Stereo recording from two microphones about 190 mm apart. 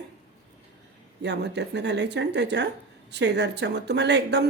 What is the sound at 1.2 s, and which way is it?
A woman's voice, 65° right (ahead or behind).